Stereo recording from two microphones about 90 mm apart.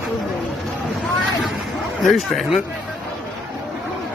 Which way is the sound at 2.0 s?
Centre (ahead or behind).